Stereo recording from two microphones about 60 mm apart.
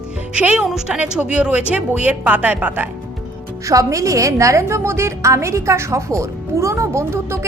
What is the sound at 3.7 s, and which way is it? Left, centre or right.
A woman's voice, right.